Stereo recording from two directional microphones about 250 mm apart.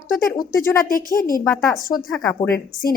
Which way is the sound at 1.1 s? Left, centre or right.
Left.